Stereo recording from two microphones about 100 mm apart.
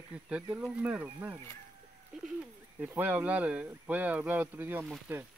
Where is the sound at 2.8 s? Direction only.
15° right (ahead or behind).